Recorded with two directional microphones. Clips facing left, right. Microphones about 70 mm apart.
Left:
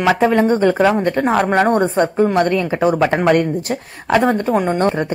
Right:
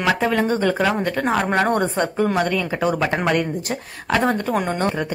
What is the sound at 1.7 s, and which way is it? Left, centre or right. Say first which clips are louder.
Speech: left 5 dB; left.